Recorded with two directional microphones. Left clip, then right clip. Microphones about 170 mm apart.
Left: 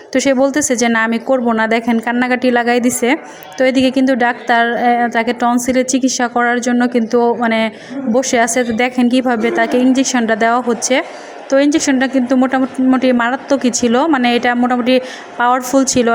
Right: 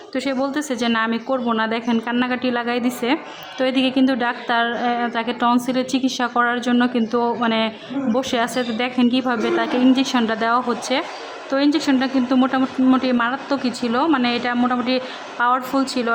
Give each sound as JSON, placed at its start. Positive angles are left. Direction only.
{"t": 0.1, "sound": "a woman's voice", "side_deg": 30}